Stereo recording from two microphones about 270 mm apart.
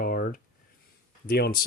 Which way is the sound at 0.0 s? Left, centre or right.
Left.